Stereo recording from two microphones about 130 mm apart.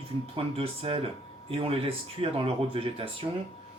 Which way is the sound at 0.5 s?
45° right (ahead or behind).